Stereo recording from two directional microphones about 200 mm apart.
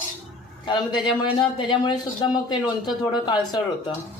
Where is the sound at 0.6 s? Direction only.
25° left (ahead or behind).